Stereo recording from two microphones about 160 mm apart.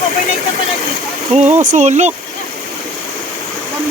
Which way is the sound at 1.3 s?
45° right (ahead or behind).